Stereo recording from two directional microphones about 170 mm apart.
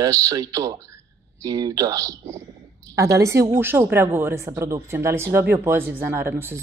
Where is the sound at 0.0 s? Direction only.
20° right (ahead or behind).